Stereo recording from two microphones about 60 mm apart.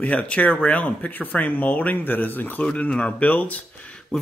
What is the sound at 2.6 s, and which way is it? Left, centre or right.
Speech, centre.